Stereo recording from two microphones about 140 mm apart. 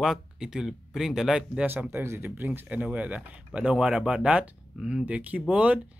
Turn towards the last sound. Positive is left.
turn(degrees=-10)  # may be behind; listen again after turning